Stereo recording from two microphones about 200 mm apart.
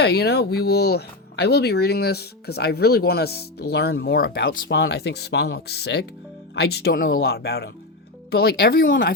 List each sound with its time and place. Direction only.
0.0 s speech: 55° left (ahead or behind)